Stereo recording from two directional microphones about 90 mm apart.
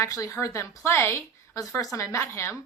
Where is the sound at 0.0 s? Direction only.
35° left (ahead or behind).